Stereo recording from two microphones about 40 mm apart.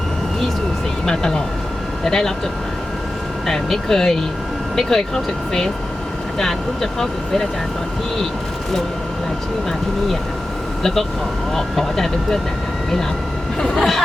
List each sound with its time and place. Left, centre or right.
1.0 s speech: centre
3.4 s speech: centre
11.5 s speech: centre
13.7 s speech: centre